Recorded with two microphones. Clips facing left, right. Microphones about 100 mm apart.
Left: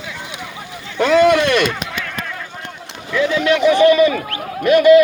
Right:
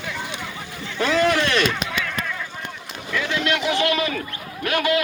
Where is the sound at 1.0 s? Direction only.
65° left (ahead or behind).